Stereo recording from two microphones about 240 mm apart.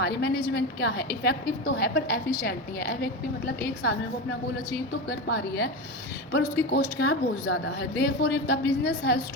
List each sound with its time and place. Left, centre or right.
0.2 s a woman's voice: left
5.0 s a woman's voice: left